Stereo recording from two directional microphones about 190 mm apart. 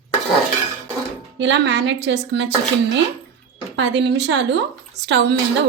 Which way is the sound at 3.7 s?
65° right (ahead or behind).